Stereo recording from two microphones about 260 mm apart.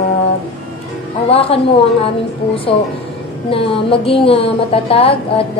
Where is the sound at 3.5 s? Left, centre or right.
Left.